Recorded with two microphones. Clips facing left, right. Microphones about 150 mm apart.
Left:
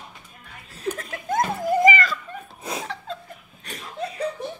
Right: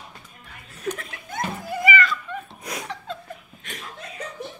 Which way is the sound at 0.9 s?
40° left (ahead or behind).